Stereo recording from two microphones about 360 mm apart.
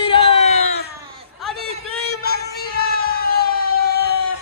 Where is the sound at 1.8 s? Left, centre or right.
Left.